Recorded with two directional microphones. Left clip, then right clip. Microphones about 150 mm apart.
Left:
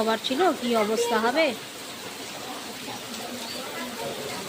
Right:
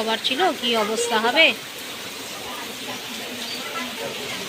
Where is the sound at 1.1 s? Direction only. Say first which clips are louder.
Right 10 dB; 20° left (ahead or behind).